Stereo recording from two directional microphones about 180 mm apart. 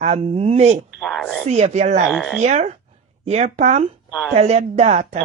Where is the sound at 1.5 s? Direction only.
35° right (ahead or behind).